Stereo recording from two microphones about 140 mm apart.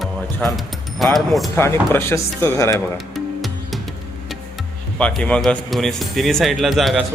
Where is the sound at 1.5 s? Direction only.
20° left (ahead or behind).